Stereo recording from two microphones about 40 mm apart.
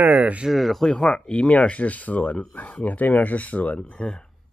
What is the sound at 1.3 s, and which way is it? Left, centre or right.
Speech, left.